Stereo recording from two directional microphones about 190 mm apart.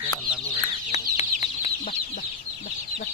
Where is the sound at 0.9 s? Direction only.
35° left (ahead or behind).